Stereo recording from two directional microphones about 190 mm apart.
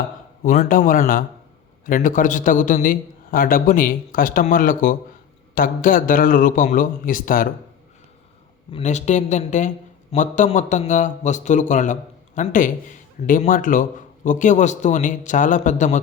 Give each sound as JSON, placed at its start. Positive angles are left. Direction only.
{"t": 0.4, "sound": "a man's voice", "side_deg": 40}
{"t": 8.7, "sound": "a man's voice", "side_deg": 40}